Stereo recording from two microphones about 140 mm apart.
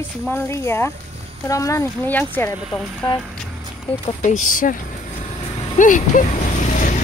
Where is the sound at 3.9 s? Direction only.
40° left (ahead or behind).